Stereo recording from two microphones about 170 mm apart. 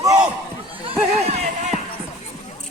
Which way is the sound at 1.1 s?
40° right (ahead or behind).